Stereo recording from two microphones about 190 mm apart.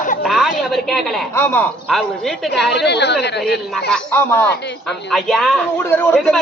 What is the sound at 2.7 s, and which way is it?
Speech, 60° left (ahead or behind).